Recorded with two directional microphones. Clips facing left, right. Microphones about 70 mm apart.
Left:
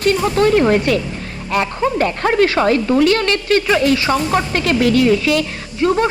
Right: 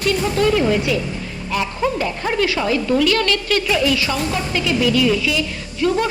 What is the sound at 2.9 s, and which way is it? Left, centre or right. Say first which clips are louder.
Speech: left 3 dB; left.